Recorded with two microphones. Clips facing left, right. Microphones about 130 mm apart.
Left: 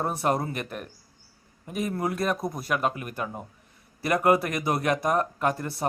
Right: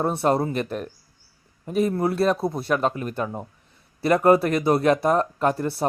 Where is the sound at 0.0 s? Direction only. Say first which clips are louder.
Right 5 dB; 30° right (ahead or behind).